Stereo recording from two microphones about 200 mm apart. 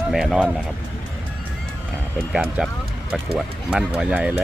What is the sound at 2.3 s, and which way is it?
Speech, 5° right (ahead or behind).